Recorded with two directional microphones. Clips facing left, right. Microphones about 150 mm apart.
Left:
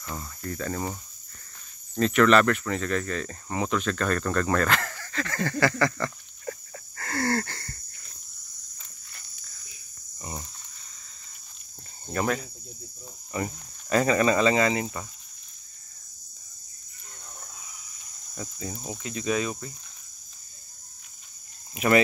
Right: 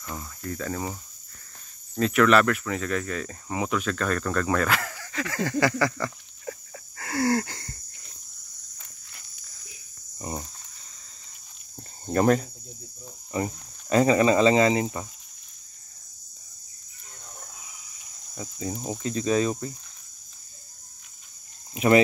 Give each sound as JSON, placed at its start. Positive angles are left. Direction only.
{"t": 0.0, "sound": "speech", "side_deg": -5}
{"t": 2.0, "sound": "speech", "side_deg": -5}
{"t": 10.1, "sound": "cricket", "side_deg": -30}
{"t": 12.1, "sound": "cricket", "side_deg": -40}
{"t": 13.5, "sound": "speech", "side_deg": -20}
{"t": 18.3, "sound": "cricket", "side_deg": -20}
{"t": 21.7, "sound": "speech", "side_deg": -25}